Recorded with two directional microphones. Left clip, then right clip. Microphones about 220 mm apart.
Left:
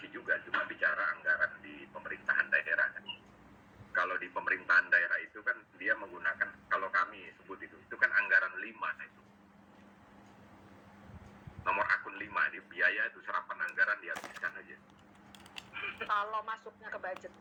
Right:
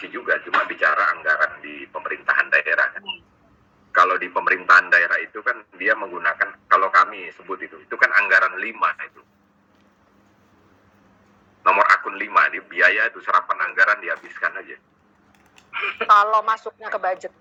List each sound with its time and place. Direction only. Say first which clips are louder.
0.0 s a sound: right 12 dB; 45° right (ahead or behind)
3.9 s a man's voice: right 16 dB; 45° right (ahead or behind)
11.6 s a man's voice: right 16 dB; 45° right (ahead or behind)